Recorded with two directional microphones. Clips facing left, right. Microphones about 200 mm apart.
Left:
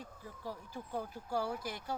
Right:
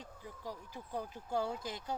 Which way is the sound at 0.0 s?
15° right (ahead or behind).